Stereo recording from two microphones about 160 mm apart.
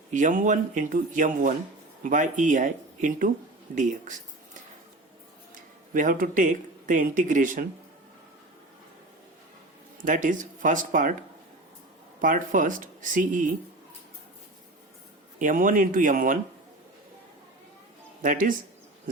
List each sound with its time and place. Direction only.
0.1 s speech: 55° right (ahead or behind)
5.9 s speech: 55° right (ahead or behind)
10.0 s speech: 55° right (ahead or behind)
12.2 s speech: 55° right (ahead or behind)
15.4 s speech: 55° right (ahead or behind)
18.2 s speech: 60° right (ahead or behind)